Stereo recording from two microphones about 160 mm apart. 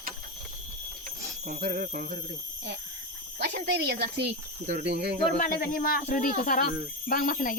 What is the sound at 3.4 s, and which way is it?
Speech, 85° right.